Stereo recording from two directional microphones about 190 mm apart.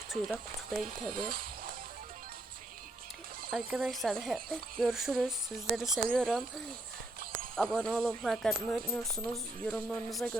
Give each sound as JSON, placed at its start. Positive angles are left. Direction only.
{"t": 0.1, "sound": "speech", "side_deg": 0}
{"t": 1.1, "sound": "speech", "side_deg": -50}
{"t": 3.5, "sound": "speech", "side_deg": 0}
{"t": 7.5, "sound": "speech", "side_deg": 0}